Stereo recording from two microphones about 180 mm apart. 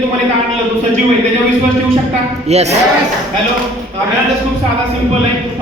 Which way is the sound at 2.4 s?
35° right (ahead or behind).